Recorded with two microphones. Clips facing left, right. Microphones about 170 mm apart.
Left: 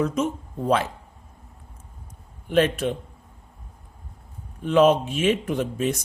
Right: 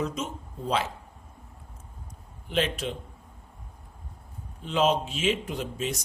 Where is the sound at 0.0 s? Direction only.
55° left (ahead or behind).